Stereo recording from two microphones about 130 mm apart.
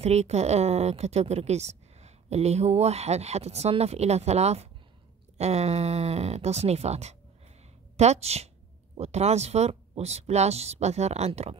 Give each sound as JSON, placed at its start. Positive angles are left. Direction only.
{"t": 0.0, "sound": "a woman's voice", "side_deg": -55}